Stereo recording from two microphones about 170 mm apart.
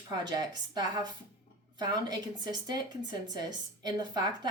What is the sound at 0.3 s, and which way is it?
A woman's voice, 25° right (ahead or behind).